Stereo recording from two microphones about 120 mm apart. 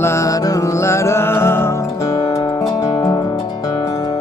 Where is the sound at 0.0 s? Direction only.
25° left (ahead or behind).